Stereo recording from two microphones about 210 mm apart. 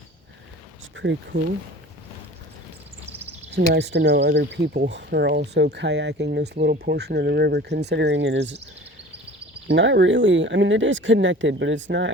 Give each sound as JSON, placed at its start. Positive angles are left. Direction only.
{"t": 0.9, "sound": "speech", "side_deg": -60}
{"t": 3.5, "sound": "speech", "side_deg": -55}
{"t": 9.6, "sound": "speech", "side_deg": -60}